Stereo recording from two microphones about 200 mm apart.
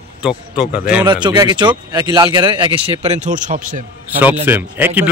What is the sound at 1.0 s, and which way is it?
Speech, 20° right (ahead or behind).